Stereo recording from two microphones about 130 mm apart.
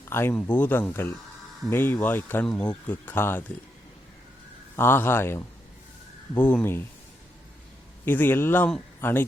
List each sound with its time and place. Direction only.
0.1 s speech: 20° left (ahead or behind)
4.8 s speech: 20° left (ahead or behind)
8.0 s speech: 15° left (ahead or behind)